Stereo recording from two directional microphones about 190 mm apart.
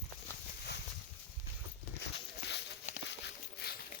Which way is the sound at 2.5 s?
65° left (ahead or behind).